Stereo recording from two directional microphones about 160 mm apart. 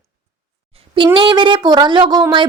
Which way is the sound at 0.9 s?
30° right (ahead or behind).